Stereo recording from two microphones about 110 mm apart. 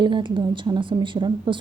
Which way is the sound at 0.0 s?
45° right (ahead or behind).